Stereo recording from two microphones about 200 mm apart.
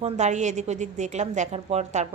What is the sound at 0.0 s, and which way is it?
A woman's voice, 35° right (ahead or behind).